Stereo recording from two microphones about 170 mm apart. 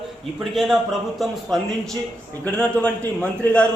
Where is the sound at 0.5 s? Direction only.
Centre (ahead or behind).